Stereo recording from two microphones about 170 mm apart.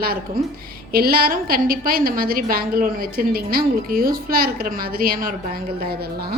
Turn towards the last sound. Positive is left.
turn(degrees=-60)  # may be behind; listen again after turning